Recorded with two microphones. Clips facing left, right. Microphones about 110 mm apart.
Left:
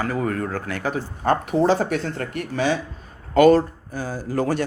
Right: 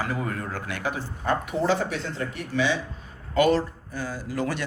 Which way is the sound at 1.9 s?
55° left (ahead or behind).